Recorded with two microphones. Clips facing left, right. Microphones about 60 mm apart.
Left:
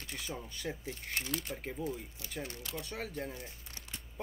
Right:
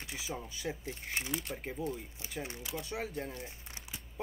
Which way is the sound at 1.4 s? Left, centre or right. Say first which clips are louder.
Right 1 dB; centre.